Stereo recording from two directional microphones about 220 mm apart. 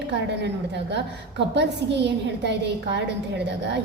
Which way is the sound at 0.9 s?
50° right (ahead or behind).